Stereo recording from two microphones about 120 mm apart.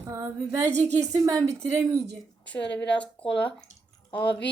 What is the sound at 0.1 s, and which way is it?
A woman's voice, 25° right (ahead or behind).